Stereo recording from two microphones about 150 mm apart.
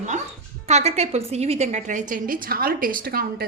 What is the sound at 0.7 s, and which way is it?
A woman's voice, 45° right (ahead or behind).